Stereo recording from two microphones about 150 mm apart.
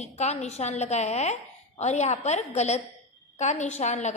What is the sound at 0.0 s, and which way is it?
A woman's voice, 45° left (ahead or behind).